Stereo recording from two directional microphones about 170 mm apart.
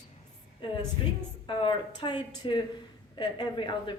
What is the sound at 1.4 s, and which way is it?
A woman's voice, 30° left (ahead or behind).